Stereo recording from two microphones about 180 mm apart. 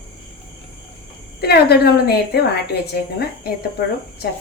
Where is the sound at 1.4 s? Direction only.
60° left (ahead or behind).